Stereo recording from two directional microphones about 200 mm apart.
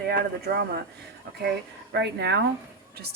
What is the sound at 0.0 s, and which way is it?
A woman's voice, 50° right (ahead or behind).